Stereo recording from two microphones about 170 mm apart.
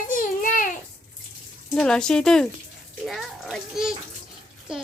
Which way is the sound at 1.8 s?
5° left (ahead or behind).